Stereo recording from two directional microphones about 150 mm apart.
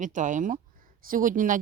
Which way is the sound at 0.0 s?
55° right (ahead or behind).